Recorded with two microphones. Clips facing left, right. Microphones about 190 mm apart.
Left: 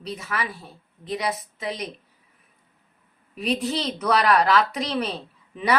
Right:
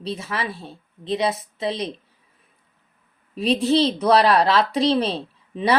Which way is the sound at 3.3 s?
30° right (ahead or behind).